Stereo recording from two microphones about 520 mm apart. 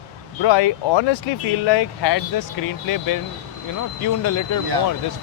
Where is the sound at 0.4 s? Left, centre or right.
Left.